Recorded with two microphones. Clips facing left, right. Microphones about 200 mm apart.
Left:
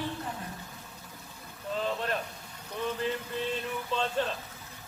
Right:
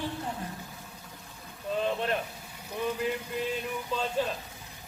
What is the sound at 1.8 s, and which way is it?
Speech, 20° right (ahead or behind).